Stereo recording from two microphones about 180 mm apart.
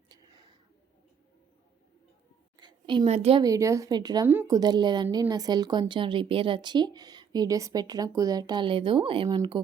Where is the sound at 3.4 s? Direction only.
15° right (ahead or behind).